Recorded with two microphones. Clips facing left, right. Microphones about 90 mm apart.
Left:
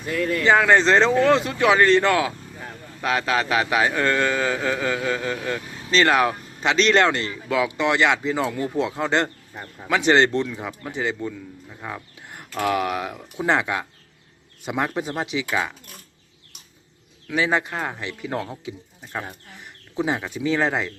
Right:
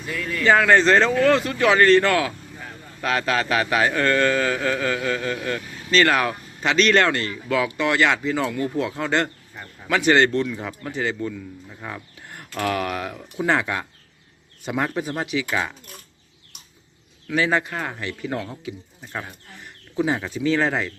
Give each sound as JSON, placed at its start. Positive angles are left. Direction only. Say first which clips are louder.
{"t": 0.1, "sound": "speech", "louder": "left 5 dB", "side_deg": 40}
{"t": 0.4, "sound": "speech", "louder": "right 1 dB", "side_deg": 15}
{"t": 15.4, "sound": "speech", "louder": "even", "side_deg": 10}
{"t": 17.2, "sound": "speech", "louder": "right 1 dB", "side_deg": 15}
{"t": 20.1, "sound": "speech", "louder": "right 1 dB", "side_deg": 15}